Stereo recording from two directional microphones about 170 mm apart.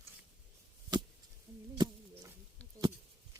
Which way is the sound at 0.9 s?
25° right (ahead or behind).